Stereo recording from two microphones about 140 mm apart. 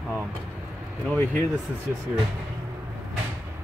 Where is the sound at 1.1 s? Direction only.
15° left (ahead or behind).